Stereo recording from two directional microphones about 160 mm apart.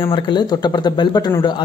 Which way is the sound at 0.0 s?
30° left (ahead or behind).